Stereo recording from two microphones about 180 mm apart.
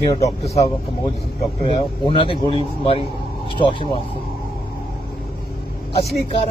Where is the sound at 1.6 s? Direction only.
30° left (ahead or behind).